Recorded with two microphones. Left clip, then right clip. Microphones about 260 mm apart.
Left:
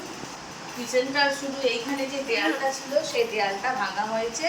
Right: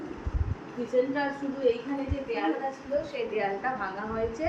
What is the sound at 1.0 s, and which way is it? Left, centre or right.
A woman's voice, centre.